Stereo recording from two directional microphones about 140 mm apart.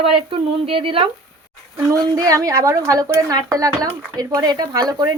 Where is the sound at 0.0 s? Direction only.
40° right (ahead or behind).